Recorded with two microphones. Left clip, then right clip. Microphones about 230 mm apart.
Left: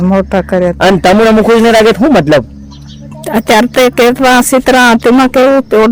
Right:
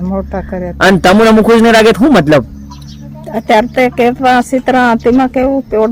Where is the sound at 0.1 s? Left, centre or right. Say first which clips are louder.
Left 8 dB; left.